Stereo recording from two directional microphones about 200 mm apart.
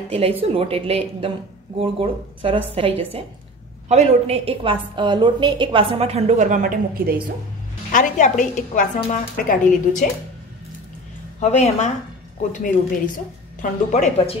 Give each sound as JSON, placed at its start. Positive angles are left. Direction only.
{"t": 0.1, "sound": "a woman's voice", "side_deg": -30}
{"t": 7.9, "sound": "a woman's voice", "side_deg": 40}
{"t": 11.3, "sound": "a woman's voice", "side_deg": 35}